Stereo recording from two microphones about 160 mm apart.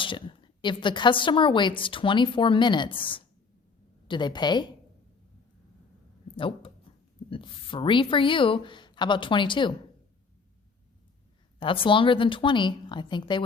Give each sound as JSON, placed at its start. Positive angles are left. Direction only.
{"t": 0.0, "sound": "a woman's voice", "side_deg": 30}
{"t": 6.3, "sound": "speech", "side_deg": 35}
{"t": 6.9, "sound": "a sound", "side_deg": 35}
{"t": 7.3, "sound": "a woman's voice", "side_deg": 35}
{"t": 11.6, "sound": "a woman's voice", "side_deg": 35}